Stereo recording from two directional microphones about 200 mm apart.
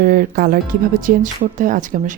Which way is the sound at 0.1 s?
45° right (ahead or behind).